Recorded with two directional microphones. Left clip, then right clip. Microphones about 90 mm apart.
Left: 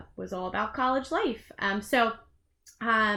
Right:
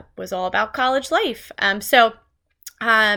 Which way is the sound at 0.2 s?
40° right (ahead or behind).